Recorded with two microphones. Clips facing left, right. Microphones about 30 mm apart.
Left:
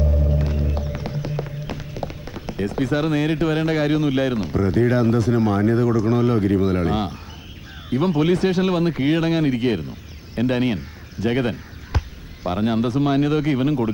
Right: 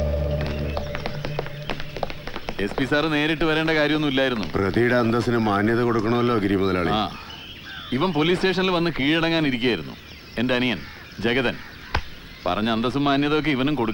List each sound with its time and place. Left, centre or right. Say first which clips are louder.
0.2 s music: left 2 dB; right
7.9 s speech: left 2 dB; right